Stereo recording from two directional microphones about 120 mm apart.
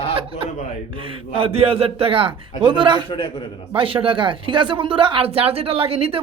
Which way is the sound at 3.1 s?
40° left (ahead or behind).